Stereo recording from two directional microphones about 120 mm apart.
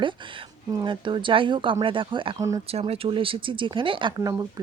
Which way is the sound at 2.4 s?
25° right (ahead or behind).